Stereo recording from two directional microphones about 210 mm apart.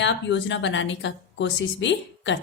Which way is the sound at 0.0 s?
60° left (ahead or behind).